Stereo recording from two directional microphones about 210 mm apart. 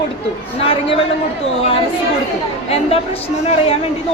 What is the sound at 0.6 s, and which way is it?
Speech, 25° left (ahead or behind).